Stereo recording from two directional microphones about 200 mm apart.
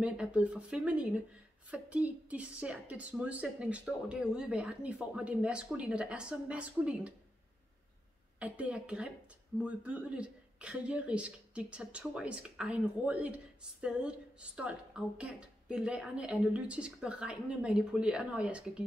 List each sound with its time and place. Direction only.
0.0 s speech: 5° right (ahead or behind)
8.4 s speech: 5° right (ahead or behind)